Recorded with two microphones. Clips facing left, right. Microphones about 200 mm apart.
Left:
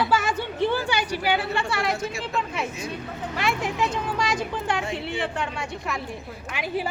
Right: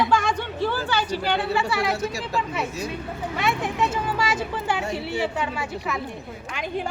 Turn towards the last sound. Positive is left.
turn(degrees=5)  # may be behind; listen again after turning